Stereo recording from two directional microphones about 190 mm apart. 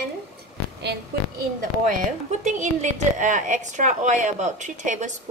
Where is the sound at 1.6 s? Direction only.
40° right (ahead or behind).